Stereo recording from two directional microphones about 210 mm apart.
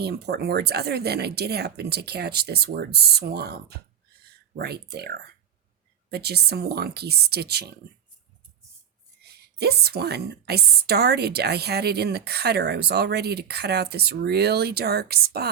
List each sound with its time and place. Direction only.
0.0 s a woman's voice: 50° right (ahead or behind)
9.2 s a woman's voice: 50° right (ahead or behind)